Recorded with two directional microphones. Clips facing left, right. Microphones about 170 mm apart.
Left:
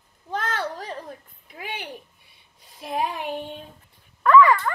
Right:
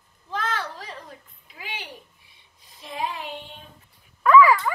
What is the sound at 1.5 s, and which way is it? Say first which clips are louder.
Child singing: left 4 dB; 55° left (ahead or behind).